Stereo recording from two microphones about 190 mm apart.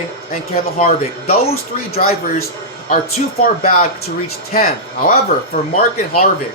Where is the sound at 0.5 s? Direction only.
50° left (ahead or behind).